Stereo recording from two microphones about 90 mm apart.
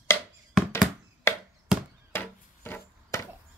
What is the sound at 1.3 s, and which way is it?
Chop, 30° left (ahead or behind).